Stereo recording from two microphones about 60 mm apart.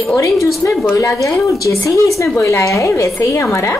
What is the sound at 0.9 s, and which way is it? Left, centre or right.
Speech, left.